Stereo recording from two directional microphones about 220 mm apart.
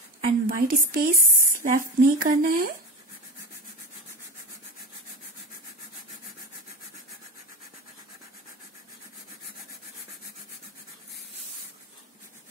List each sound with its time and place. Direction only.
0.2 s a woman's voice: 40° right (ahead or behind)